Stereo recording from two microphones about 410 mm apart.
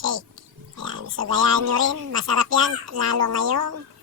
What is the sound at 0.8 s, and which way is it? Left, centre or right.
Speech, right.